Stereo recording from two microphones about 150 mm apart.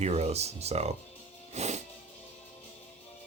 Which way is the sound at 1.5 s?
50° right (ahead or behind).